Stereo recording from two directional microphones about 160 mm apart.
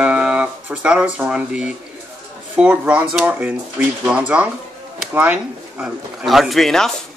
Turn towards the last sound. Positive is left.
turn(degrees=0)  # may be behind; listen again after turning